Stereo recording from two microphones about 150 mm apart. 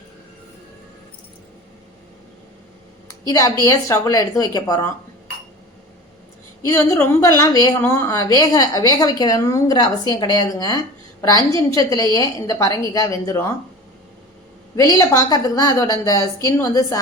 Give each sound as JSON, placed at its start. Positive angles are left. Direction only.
{"t": 3.1, "sound": "a sound", "side_deg": 25}
{"t": 3.6, "sound": "a woman's voice", "side_deg": 20}
{"t": 6.7, "sound": "a woman's voice", "side_deg": 20}
{"t": 14.8, "sound": "a woman's voice", "side_deg": 20}